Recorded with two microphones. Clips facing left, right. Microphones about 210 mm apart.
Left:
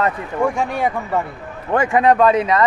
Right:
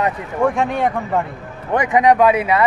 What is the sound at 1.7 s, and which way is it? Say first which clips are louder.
Speech: even; 20° right (ahead or behind).